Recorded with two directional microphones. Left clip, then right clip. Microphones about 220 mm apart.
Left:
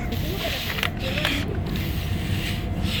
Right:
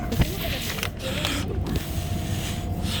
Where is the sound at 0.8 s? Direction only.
30° right (ahead or behind).